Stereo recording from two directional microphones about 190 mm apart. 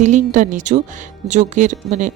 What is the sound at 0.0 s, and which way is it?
Speech, 40° right (ahead or behind).